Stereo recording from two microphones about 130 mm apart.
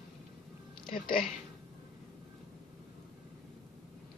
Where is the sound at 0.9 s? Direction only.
90° left.